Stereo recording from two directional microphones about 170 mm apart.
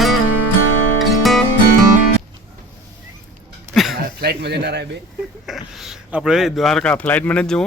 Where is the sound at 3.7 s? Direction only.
Centre (ahead or behind).